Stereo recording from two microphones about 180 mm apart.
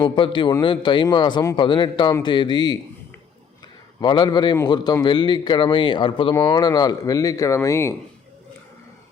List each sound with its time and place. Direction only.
0.0 s a man's voice: 25° left (ahead or behind)
4.0 s a man's voice: 25° left (ahead or behind)